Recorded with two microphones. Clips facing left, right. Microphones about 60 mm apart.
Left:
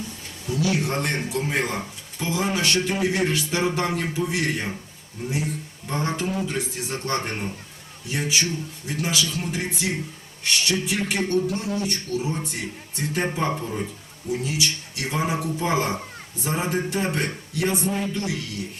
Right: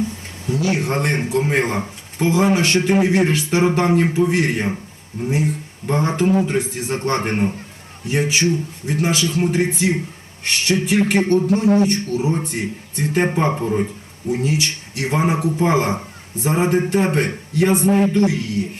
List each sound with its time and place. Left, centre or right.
0.4 s a man's voice: right